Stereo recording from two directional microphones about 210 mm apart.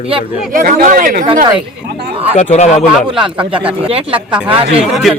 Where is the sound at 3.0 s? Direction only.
25° right (ahead or behind).